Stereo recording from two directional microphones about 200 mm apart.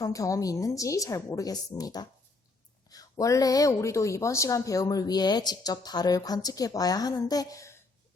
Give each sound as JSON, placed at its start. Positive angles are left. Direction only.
{"t": 0.0, "sound": "speech", "side_deg": 15}